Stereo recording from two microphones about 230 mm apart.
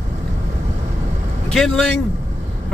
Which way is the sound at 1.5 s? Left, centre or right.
Centre.